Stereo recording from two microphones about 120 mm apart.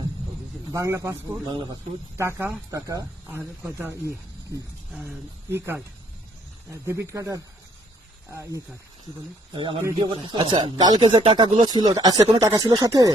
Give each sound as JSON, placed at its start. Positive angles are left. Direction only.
{"t": 0.7, "sound": "speech", "side_deg": -25}
{"t": 3.3, "sound": "speech", "side_deg": -20}
{"t": 9.5, "sound": "speech", "side_deg": -45}
{"t": 11.7, "sound": "speech", "side_deg": -35}